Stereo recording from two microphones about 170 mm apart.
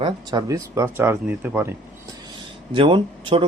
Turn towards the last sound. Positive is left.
turn(degrees=-30)  # may be behind; listen again after turning